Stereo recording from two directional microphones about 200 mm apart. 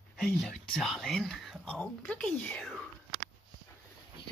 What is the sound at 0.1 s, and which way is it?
Speech, 5° left (ahead or behind).